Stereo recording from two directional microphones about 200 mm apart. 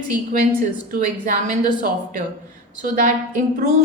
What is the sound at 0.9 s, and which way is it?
Speech, 40° right (ahead or behind).